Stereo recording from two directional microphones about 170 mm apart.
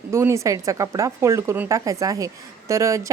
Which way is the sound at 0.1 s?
15° right (ahead or behind).